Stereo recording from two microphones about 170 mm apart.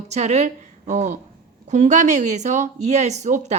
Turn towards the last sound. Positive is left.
turn(degrees=-45)  # may be behind; listen again after turning